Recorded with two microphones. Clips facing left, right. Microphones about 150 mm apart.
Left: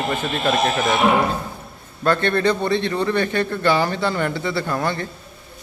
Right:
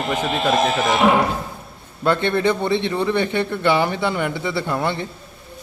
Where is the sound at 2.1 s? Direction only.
20° right (ahead or behind).